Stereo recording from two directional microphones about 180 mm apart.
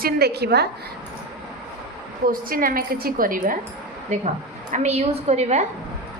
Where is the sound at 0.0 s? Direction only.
65° right (ahead or behind).